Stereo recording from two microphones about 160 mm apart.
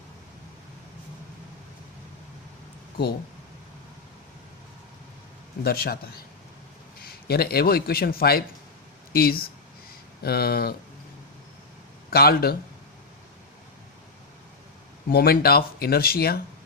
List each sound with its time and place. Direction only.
5.6 s a man's voice: 75° left (ahead or behind)
12.1 s speech: 70° left (ahead or behind)
15.1 s speech: 70° left (ahead or behind)